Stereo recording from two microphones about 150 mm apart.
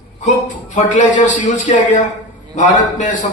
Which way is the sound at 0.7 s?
55° left (ahead or behind).